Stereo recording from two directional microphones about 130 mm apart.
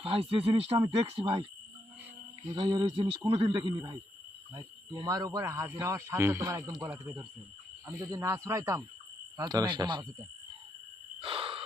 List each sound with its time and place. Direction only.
0.0 s speech: 45° right (ahead or behind)
2.6 s speech: 35° right (ahead or behind)
9.4 s speech: 30° right (ahead or behind)
11.2 s a sound: 45° right (ahead or behind)